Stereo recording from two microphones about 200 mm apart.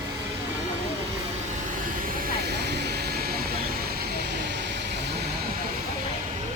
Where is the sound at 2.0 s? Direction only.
50° right (ahead or behind).